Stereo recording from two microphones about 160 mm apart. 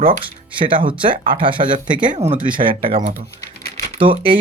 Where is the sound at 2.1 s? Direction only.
40° right (ahead or behind).